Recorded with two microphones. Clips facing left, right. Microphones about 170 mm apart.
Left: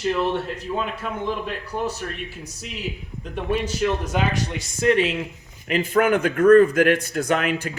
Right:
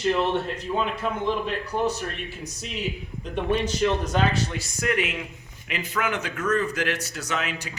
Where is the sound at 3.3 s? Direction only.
10° left (ahead or behind).